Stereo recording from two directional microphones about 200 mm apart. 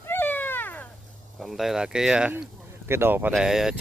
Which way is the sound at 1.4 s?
Centre (ahead or behind).